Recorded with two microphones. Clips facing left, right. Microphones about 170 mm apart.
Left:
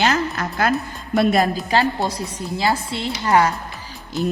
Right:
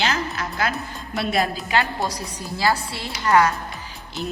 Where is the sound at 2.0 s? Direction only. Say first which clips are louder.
Left 3 dB; 25° left (ahead or behind).